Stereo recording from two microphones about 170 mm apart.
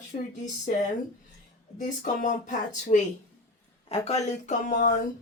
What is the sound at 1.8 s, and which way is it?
Speech, 45° left (ahead or behind).